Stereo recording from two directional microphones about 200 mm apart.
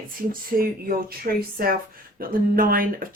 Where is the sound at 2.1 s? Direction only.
45° right (ahead or behind).